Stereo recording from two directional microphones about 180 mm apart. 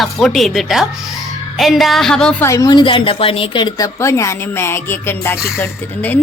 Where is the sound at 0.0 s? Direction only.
Centre (ahead or behind).